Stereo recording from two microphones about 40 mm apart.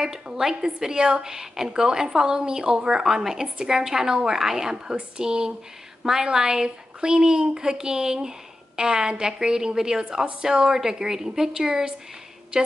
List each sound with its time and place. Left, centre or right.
0.0 s a woman's voice: centre